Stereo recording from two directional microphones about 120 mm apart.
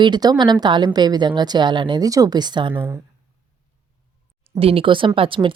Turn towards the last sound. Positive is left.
turn(degrees=-45)  # may be behind; listen again after turning